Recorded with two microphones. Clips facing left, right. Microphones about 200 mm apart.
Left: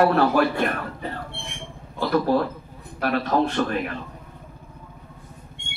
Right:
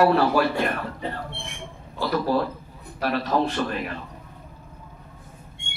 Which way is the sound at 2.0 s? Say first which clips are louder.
Left 2 dB; 50° left (ahead or behind).